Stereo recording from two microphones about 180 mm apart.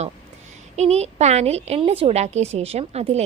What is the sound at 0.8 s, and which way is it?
A woman's voice, 35° right (ahead or behind).